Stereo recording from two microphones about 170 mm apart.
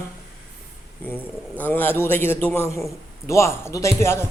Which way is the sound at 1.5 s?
10° left (ahead or behind).